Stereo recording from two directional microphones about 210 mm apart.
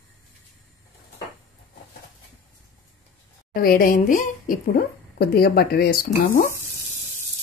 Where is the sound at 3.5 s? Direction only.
45° left (ahead or behind).